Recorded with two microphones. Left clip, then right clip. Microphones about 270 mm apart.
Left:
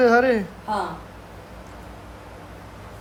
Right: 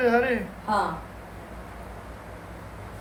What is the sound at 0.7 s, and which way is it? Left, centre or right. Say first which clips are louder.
Speech: right 1 dB; centre.